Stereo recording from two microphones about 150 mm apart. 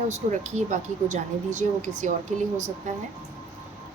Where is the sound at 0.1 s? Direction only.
50° right (ahead or behind).